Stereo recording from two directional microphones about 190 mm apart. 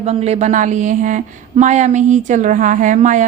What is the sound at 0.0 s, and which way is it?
Speech, 35° right (ahead or behind).